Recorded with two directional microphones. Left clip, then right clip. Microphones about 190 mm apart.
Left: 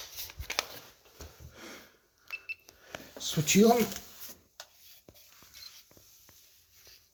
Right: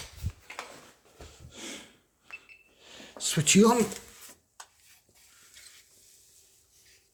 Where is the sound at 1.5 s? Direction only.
45° right (ahead or behind).